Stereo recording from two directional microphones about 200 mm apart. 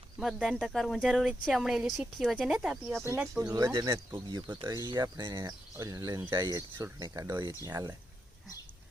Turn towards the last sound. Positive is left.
turn(degrees=-15)  # may be behind; listen again after turning